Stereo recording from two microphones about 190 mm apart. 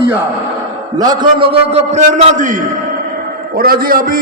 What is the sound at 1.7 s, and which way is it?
Speech, 35° right (ahead or behind).